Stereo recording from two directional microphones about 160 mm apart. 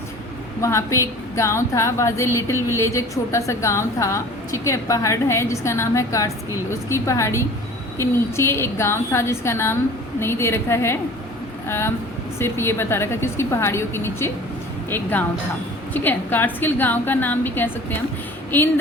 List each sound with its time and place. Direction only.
0.6 s a woman's voice: 20° left (ahead or behind)
12.4 s a woman's voice: 15° left (ahead or behind)